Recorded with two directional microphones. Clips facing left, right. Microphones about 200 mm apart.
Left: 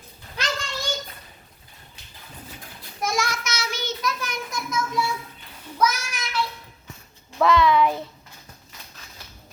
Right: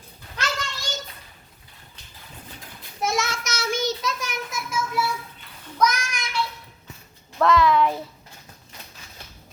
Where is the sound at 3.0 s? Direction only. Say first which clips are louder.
Right 1 dB; 25° right (ahead or behind).